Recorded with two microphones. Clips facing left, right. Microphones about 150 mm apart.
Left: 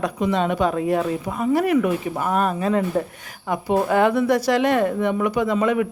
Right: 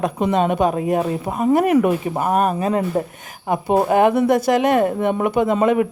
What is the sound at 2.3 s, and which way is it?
Speech, 40° right (ahead or behind).